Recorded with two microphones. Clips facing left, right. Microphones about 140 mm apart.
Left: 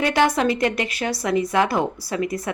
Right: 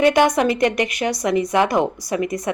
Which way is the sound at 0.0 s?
20° right (ahead or behind).